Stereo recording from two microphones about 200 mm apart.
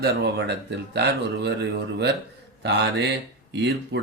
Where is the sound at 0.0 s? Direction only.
55° right (ahead or behind).